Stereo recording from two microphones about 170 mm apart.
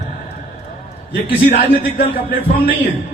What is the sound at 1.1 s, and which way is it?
A man's voice, 55° left (ahead or behind).